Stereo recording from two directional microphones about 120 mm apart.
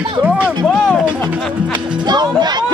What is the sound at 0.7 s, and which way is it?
Music, 5° left (ahead or behind).